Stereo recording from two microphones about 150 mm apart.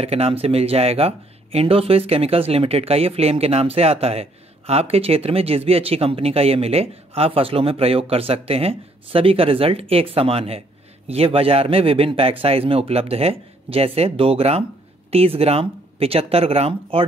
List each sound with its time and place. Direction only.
0.0 s speech: 40° right (ahead or behind)